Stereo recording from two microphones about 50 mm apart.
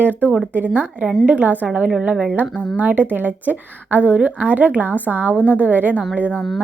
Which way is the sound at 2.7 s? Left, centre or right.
Right.